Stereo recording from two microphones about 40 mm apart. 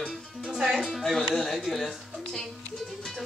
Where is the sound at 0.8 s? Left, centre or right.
Centre.